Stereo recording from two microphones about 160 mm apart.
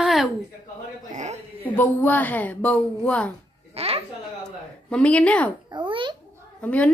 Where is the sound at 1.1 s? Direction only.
50° right (ahead or behind).